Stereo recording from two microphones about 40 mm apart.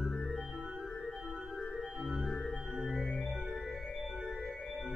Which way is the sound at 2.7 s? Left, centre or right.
Centre.